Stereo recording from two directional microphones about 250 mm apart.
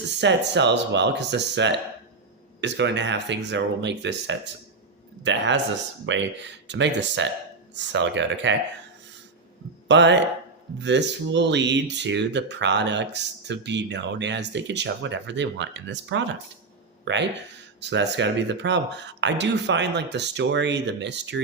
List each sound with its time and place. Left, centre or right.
0.2 s speech: right
9.9 s speech: right